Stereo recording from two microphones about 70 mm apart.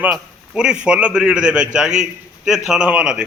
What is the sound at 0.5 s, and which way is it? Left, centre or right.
A man's voice, centre.